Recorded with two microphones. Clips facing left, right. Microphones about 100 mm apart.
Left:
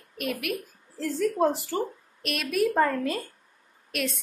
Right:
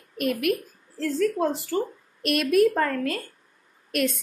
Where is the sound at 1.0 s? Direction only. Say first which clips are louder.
Right 1 dB; 20° left (ahead or behind).